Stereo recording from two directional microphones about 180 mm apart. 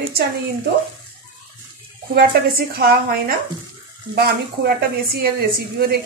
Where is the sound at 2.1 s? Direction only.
55° right (ahead or behind).